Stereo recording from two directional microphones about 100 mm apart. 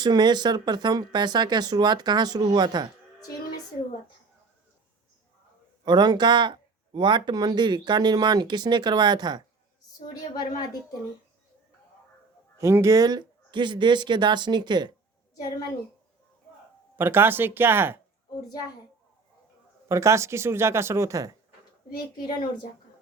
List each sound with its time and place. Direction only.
0.0 s speech: 45° right (ahead or behind)
5.8 s speech: 45° right (ahead or behind)
10.3 s speech: 40° left (ahead or behind)
12.5 s speech: 30° right (ahead or behind); by 14.9 s 50° right (ahead or behind)
17.0 s speech: 20° right (ahead or behind)
19.9 s speech: 30° right (ahead or behind)